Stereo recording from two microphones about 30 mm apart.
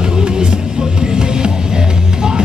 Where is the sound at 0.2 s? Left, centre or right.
Right.